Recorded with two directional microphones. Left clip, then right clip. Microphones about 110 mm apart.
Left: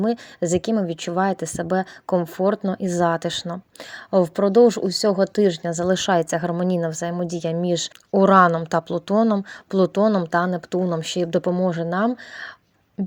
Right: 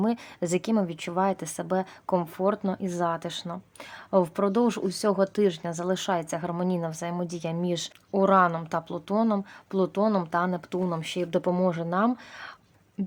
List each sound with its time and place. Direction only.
0.0 s speech: 25° left (ahead or behind); by 3.6 s 40° left (ahead or behind)
4.1 s speech: 30° left (ahead or behind)
8.1 s speech: 50° left (ahead or behind)
10.3 s speech: 35° left (ahead or behind)